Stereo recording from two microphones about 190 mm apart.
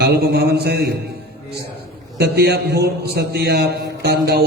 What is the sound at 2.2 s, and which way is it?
A man's voice, 60° right (ahead or behind).